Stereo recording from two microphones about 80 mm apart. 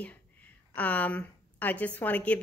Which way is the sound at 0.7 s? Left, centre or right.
Centre.